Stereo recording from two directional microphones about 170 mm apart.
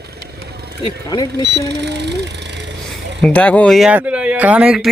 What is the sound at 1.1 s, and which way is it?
Speech, 20° left (ahead or behind).